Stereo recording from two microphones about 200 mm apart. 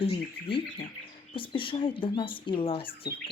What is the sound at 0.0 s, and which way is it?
Speech, 25° left (ahead or behind).